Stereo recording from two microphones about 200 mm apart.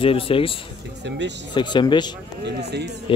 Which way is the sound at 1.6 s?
25° left (ahead or behind).